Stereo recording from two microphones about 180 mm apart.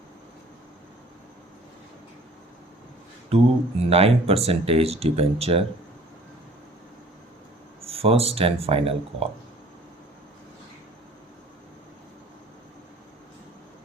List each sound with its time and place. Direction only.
3.2 s speech: 35° right (ahead or behind)
7.9 s speech: 35° right (ahead or behind)